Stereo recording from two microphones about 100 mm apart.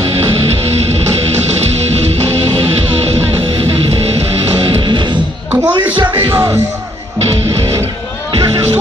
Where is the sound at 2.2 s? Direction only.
30° right (ahead or behind).